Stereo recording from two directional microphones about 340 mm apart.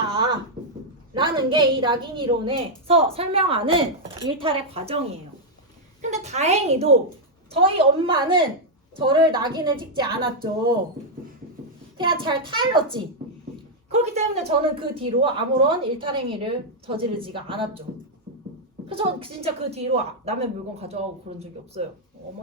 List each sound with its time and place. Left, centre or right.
1.1 s a woman's voice: centre
11.9 s speech: centre
18.9 s speech: centre